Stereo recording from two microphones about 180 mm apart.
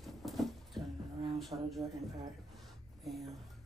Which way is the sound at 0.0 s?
Centre (ahead or behind).